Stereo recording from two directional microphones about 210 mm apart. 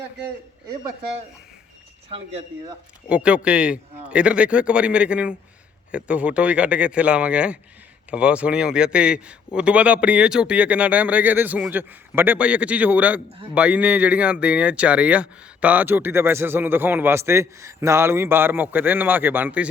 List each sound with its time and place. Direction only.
2.0 s speech: 25° right (ahead or behind)
3.2 s a man's voice: 5° right (ahead or behind)